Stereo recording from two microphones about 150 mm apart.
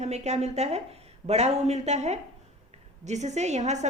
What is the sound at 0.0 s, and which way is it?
A woman's voice, 45° right (ahead or behind).